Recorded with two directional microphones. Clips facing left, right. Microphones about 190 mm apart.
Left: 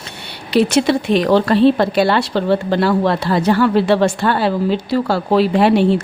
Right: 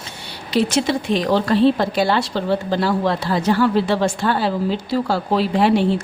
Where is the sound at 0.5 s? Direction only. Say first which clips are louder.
Left 5 dB; 65° left (ahead or behind).